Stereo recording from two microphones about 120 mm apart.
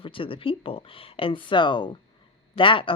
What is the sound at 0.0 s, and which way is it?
Speech, 45° left (ahead or behind).